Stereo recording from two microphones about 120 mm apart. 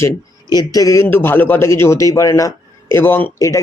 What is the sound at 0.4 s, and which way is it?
Speech, 35° left (ahead or behind).